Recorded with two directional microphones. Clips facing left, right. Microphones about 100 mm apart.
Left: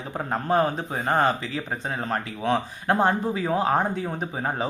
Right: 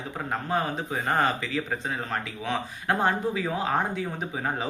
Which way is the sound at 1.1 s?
30° left (ahead or behind).